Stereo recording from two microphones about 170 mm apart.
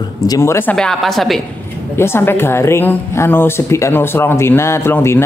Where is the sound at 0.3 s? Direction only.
15° left (ahead or behind); by 1.4 s centre (ahead or behind).